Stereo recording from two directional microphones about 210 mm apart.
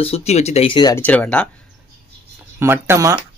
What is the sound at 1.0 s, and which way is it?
Speech, 5° left (ahead or behind).